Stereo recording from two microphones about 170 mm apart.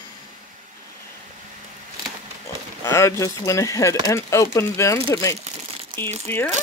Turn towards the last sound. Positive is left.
turn(degrees=10)  # may be behind; listen again after turning